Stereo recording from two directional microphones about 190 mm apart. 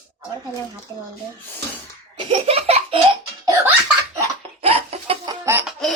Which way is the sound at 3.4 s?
15° right (ahead or behind).